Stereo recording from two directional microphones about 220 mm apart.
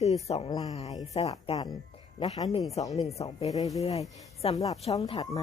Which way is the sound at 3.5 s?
15° left (ahead or behind).